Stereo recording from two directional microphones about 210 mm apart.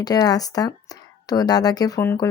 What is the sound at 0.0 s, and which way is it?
A woman's voice, 20° left (ahead or behind).